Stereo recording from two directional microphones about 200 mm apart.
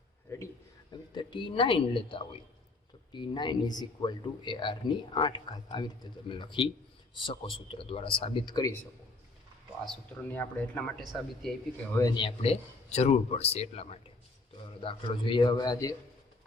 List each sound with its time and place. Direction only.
0.3 s a man's voice: 10° left (ahead or behind)
1.1 s speech: 25° left (ahead or behind)
9.8 s speech: 10° left (ahead or behind)
11.9 s speech: 20° left (ahead or behind)